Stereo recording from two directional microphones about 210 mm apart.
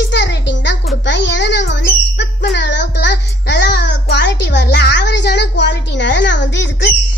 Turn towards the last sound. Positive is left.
turn(degrees=55)  # may be behind; listen again after turning